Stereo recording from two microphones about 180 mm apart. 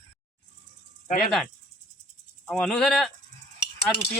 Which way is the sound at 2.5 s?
5° left (ahead or behind).